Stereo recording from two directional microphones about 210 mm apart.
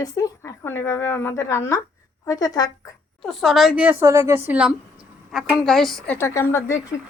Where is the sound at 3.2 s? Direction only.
Centre (ahead or behind).